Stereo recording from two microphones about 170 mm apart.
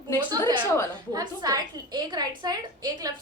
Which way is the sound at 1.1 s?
25° right (ahead or behind).